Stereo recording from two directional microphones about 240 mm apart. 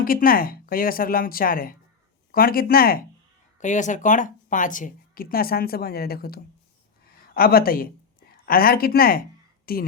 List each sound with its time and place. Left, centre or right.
0.0 s speech: left